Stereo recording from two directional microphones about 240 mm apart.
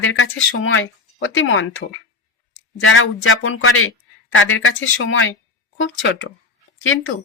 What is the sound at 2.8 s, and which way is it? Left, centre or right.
A man's voice, left.